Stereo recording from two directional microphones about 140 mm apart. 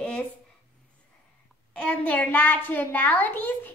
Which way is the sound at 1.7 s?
10° left (ahead or behind).